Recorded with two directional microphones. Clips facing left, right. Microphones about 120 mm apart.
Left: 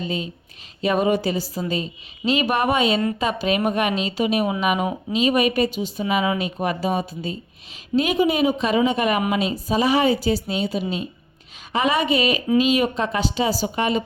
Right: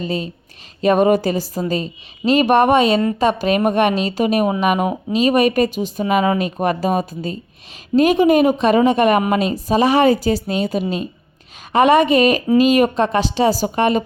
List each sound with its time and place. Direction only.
0.0 s a woman's voice: 40° right (ahead or behind)
4.9 s a woman's voice: 40° right (ahead or behind)